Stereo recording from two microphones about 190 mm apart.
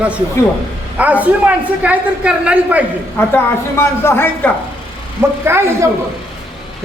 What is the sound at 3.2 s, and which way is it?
A woman's voice, 10° left (ahead or behind).